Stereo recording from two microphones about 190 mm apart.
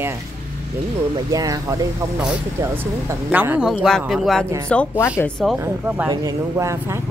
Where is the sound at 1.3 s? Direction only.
20° right (ahead or behind); by 5.5 s 5° left (ahead or behind).